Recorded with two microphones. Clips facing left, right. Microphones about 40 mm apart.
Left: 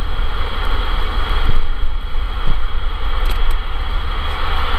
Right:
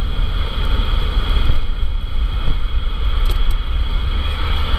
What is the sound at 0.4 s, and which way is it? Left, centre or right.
Vehicle, centre.